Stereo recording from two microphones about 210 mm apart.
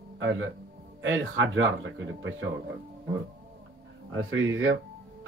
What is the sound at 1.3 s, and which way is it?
Speech, 60° right (ahead or behind).